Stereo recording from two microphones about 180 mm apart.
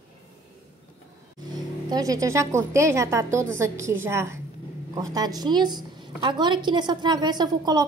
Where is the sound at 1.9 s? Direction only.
20° right (ahead or behind).